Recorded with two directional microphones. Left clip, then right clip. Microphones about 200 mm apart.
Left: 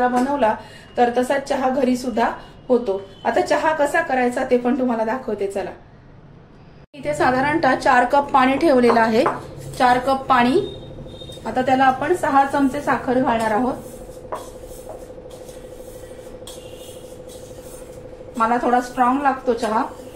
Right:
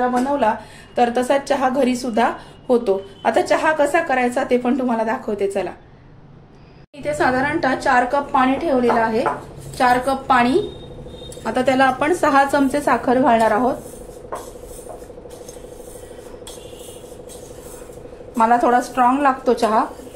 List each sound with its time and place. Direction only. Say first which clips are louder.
0.4 s a woman's voice: even; 25° right (ahead or behind)
1.0 s a woman's voice: right 1 dB; 40° right (ahead or behind)
7.0 s a woman's voice: even; 10° right (ahead or behind)
7.6 s a woman's voice: left 2 dB; 10° left (ahead or behind)
8.8 s speech: left 2 dB; 35° left (ahead or behind)
9.8 s a woman's voice: even; 10° right (ahead or behind)
11.4 s a woman's voice: even; 45° right (ahead or behind)
18.4 s a woman's voice: right 3 dB; 55° right (ahead or behind)